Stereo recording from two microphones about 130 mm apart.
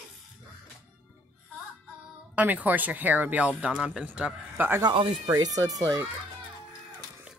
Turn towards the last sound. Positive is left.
turn(degrees=-25)  # may be behind; listen again after turning